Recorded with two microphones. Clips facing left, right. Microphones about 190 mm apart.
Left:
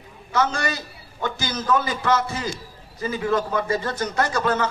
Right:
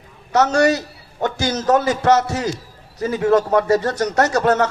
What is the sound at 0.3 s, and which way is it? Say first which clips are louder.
A man's voice: right 8 dB; 75° right (ahead or behind).